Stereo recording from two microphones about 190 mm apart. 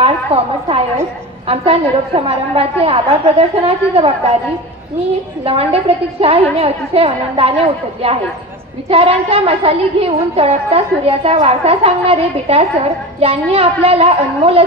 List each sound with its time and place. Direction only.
0.0 s a woman's voice: 30° right (ahead or behind)
5.4 s a woman's voice: 30° right (ahead or behind)